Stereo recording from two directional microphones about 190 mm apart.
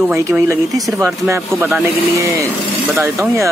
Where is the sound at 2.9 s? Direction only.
15° right (ahead or behind).